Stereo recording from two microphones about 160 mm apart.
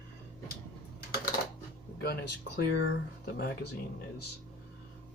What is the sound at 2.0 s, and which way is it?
Speech, 85° left.